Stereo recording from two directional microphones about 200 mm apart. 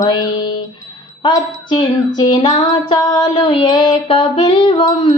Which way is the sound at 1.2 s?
25° left (ahead or behind).